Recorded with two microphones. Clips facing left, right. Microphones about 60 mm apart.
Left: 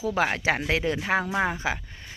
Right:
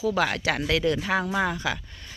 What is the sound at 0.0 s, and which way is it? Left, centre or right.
Speech, left.